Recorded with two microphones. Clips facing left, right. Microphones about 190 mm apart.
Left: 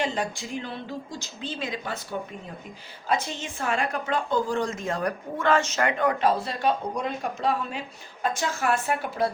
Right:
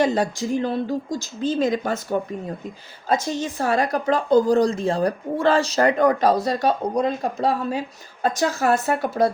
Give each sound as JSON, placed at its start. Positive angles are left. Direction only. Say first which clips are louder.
{"t": 0.0, "sound": "a woman's voice", "louder": "right 8 dB", "side_deg": -40}